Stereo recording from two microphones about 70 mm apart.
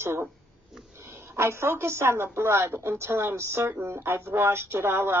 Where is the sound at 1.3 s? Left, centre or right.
Right.